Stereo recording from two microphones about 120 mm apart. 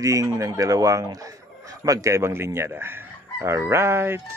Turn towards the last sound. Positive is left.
turn(degrees=-20)  # may be behind; listen again after turning